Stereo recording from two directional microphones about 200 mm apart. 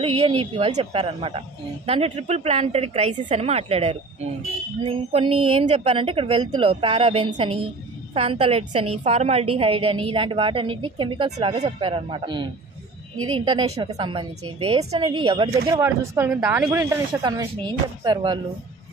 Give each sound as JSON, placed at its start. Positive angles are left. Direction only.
{"t": 0.0, "sound": "a woman's voice", "side_deg": -25}
{"t": 13.5, "sound": "a woman's voice", "side_deg": -25}
{"t": 15.7, "sound": "speech", "side_deg": -10}
{"t": 17.2, "sound": "a woman's voice", "side_deg": -20}